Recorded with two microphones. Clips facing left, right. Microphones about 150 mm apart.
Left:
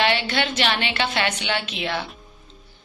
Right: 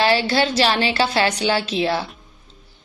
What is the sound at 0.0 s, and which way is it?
A woman's voice, 35° right (ahead or behind).